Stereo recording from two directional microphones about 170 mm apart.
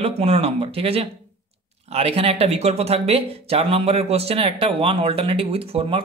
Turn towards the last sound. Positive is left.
turn(degrees=-35)  # may be behind; listen again after turning